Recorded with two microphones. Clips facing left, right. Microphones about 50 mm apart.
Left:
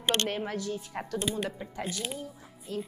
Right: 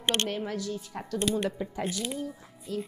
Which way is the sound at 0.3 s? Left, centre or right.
Centre.